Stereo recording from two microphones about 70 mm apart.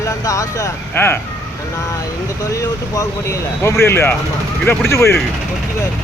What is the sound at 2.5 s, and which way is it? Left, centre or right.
Speech, left.